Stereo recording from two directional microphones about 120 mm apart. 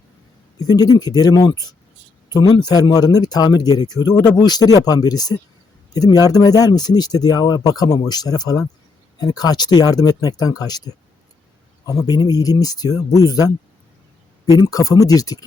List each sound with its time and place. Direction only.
0.6 s speech: 35° left (ahead or behind)
11.9 s speech: 30° left (ahead or behind)
14.4 s speech: 30° left (ahead or behind)